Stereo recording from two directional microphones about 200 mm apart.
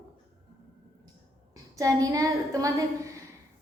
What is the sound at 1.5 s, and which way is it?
A woman's voice, 15° right (ahead or behind).